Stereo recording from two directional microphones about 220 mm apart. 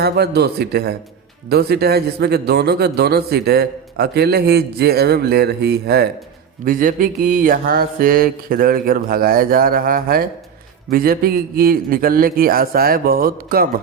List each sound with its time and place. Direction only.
0.0 s a man's voice: 45° right (ahead or behind)
6.7 s mantra: 40° right (ahead or behind)
10.9 s a man's voice: 40° right (ahead or behind)